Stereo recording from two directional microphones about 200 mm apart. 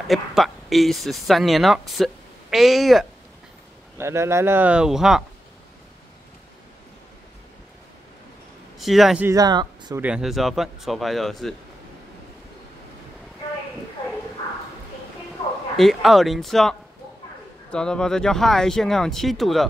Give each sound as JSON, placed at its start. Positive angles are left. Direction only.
{"t": 0.1, "sound": "speech", "side_deg": 0}
{"t": 4.0, "sound": "speech", "side_deg": -15}
{"t": 8.7, "sound": "speech", "side_deg": 0}
{"t": 9.3, "sound": "speech", "side_deg": -20}
{"t": 10.0, "sound": "speech", "side_deg": -5}
{"t": 15.7, "sound": "speech", "side_deg": 0}